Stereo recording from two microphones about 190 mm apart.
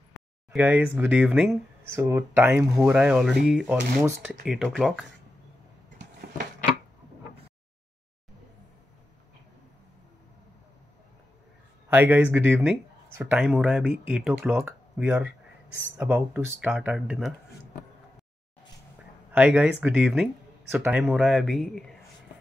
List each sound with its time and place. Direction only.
0.5 s speech: 10° right (ahead or behind)
1.9 s speech: 15° right (ahead or behind); by 5.0 s centre (ahead or behind)
6.2 s a sound: 55° right (ahead or behind)
11.9 s speech: 10° right (ahead or behind)
19.3 s speech: 5° right (ahead or behind)
21.1 s speech: centre (ahead or behind)